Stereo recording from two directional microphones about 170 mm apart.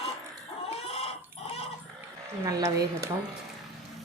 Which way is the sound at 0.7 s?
35° left (ahead or behind).